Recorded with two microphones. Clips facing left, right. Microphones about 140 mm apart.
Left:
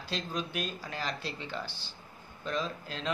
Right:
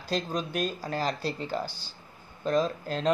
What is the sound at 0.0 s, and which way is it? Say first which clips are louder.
Speech: right 5 dB; 45° right (ahead or behind).